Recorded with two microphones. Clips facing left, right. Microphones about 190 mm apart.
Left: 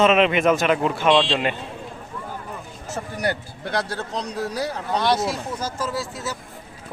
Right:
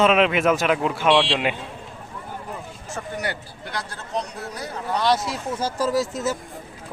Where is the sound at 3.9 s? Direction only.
80° left.